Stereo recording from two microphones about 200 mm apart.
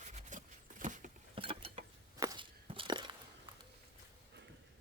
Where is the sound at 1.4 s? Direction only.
30° right (ahead or behind).